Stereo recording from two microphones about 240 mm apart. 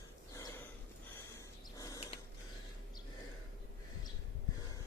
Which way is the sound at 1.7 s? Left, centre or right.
Centre.